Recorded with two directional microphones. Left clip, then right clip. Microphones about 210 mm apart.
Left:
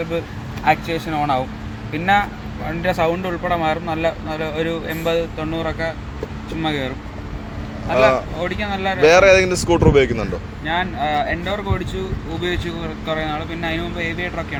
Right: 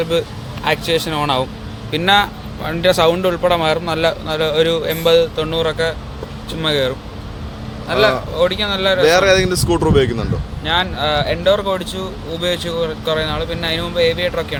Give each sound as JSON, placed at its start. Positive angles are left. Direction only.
{"t": 0.6, "sound": "speech", "side_deg": -55}
{"t": 9.0, "sound": "speech", "side_deg": -5}
{"t": 10.7, "sound": "speech", "side_deg": -45}